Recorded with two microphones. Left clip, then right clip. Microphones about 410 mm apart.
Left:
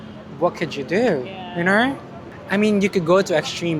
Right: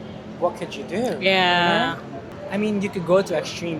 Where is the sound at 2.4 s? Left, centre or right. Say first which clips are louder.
Left 6 dB; left.